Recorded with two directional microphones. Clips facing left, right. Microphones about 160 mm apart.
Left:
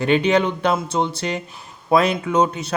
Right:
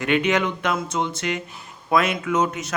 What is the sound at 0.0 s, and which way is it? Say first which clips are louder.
A man's voice: left 4 dB; 30° left (ahead or behind).